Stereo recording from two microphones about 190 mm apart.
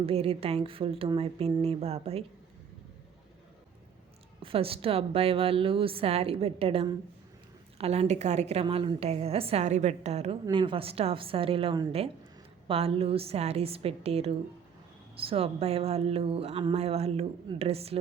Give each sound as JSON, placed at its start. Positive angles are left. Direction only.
{"t": 0.0, "sound": "a woman's voice", "side_deg": -30}
{"t": 4.4, "sound": "a woman's voice", "side_deg": -30}